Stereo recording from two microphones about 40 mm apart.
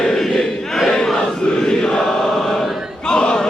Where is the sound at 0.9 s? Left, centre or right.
Centre.